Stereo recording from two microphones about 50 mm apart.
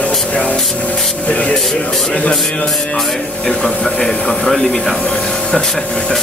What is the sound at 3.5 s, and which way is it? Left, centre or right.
Speech, centre.